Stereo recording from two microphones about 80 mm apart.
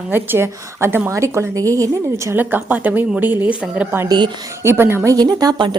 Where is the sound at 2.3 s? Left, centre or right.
Right.